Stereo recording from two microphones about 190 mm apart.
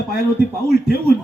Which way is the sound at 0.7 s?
50° left (ahead or behind).